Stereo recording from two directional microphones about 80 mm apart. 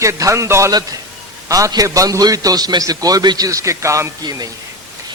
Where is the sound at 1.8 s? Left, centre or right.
Right.